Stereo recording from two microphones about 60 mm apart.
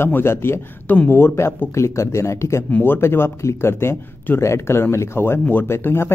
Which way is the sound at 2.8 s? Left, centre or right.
Left.